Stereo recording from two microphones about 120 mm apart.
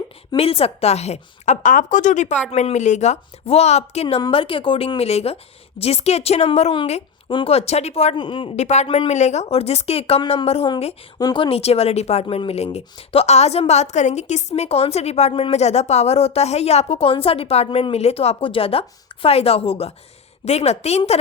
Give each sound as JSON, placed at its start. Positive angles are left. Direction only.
{"t": 0.3, "sound": "a woman's voice", "side_deg": 55}
{"t": 4.3, "sound": "a woman's voice", "side_deg": 50}
{"t": 7.3, "sound": "a woman's voice", "side_deg": 50}
{"t": 8.1, "sound": "speech", "side_deg": 45}
{"t": 8.5, "sound": "a woman's voice", "side_deg": 70}
{"t": 11.2, "sound": "speech", "side_deg": 35}
{"t": 11.4, "sound": "a woman's voice", "side_deg": 55}
{"t": 20.4, "sound": "a woman's voice", "side_deg": 65}